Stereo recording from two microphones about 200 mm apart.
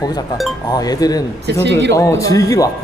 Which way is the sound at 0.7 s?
20° left (ahead or behind).